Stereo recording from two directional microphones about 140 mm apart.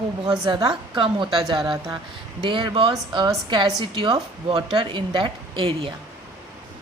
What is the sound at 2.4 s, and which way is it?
A woman's voice, 35° right (ahead or behind).